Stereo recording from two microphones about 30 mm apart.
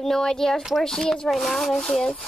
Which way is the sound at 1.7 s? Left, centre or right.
Centre.